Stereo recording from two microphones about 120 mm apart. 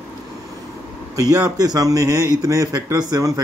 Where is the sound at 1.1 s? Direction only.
30° right (ahead or behind).